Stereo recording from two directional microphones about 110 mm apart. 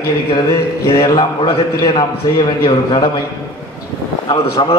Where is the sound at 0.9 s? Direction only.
35° left (ahead or behind).